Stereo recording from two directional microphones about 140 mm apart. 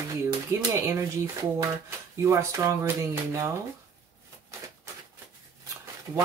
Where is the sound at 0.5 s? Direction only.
20° right (ahead or behind).